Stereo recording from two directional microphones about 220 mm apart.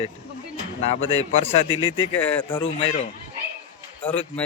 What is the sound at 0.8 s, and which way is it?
Speech, 25° left (ahead or behind).